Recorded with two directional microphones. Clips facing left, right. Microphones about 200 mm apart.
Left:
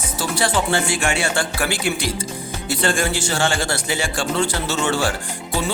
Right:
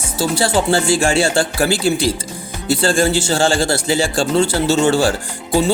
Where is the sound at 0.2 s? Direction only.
30° right (ahead or behind).